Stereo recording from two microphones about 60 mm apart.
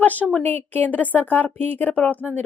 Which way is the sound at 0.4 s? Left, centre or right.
Left.